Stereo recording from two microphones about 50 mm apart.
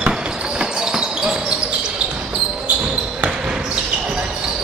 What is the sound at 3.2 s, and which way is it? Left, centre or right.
Basketball bounce, centre.